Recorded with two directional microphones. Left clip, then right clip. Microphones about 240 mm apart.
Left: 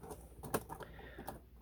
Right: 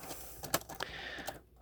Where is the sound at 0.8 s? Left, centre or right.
Right.